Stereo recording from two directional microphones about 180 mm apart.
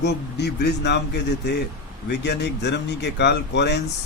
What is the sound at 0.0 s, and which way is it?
Speech, 70° left (ahead or behind).